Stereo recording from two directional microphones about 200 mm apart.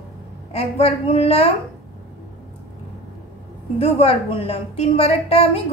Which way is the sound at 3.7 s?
30° left (ahead or behind).